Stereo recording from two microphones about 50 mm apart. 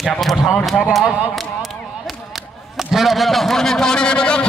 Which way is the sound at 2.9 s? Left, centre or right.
Centre.